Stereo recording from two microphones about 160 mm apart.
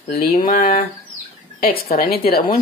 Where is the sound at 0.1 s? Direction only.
65° left (ahead or behind).